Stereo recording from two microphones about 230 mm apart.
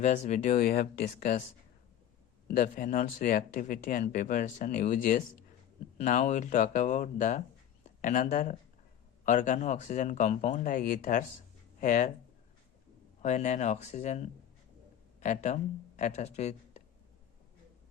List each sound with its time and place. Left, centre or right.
0.0 s speech: left
2.5 s speech: left
13.2 s speech: left